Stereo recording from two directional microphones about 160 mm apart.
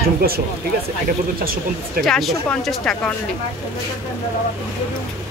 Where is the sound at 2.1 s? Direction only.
Centre (ahead or behind).